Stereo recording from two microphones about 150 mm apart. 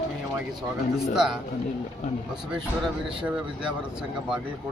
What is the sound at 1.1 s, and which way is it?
Speech, 5° right (ahead or behind).